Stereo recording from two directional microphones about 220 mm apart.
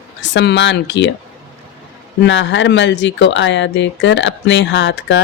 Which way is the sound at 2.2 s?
55° left (ahead or behind).